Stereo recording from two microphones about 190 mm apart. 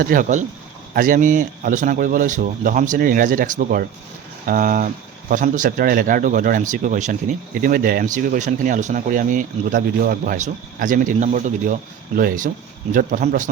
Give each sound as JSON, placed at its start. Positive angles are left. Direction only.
{"t": 0.0, "sound": "a man's voice", "side_deg": -45}